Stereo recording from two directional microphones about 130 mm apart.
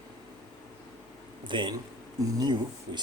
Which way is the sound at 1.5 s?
35° right (ahead or behind).